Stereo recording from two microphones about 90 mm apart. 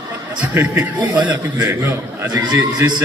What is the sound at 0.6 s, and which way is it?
Speech, 20° right (ahead or behind).